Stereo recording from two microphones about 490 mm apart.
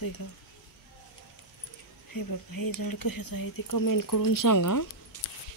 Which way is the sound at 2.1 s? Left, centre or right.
Left.